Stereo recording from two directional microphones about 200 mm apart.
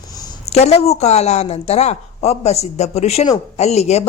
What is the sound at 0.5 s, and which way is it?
A woman's voice, 30° left (ahead or behind).